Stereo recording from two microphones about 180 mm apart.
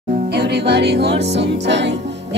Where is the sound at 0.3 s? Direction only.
70° right (ahead or behind).